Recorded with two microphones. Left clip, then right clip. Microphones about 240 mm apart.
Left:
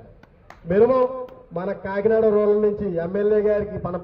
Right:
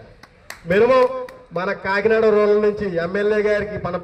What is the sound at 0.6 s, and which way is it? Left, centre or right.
A man's voice, right.